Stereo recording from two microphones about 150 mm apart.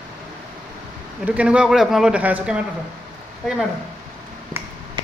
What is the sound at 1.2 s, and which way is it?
Speech, 10° right (ahead or behind).